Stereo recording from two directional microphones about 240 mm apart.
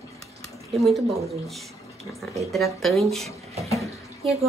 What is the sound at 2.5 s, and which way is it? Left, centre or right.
Speech, centre.